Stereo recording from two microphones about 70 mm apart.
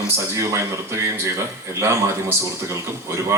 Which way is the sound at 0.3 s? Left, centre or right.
Right.